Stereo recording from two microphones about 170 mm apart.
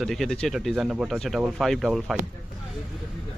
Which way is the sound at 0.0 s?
Centre (ahead or behind).